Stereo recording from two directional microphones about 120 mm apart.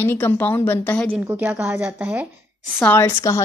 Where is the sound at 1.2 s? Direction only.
20° right (ahead or behind).